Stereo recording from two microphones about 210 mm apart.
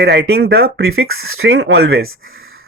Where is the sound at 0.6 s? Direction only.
75° right (ahead or behind); by 2.0 s 60° right (ahead or behind).